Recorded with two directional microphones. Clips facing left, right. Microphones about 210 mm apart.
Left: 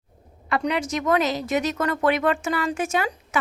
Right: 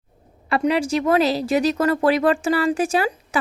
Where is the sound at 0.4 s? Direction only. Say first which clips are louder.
Right 5 dB; 25° right (ahead or behind).